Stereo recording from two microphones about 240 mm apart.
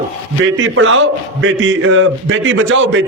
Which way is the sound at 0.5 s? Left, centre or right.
Right.